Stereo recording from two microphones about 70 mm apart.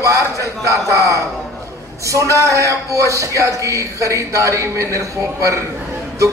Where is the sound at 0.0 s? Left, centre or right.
Right.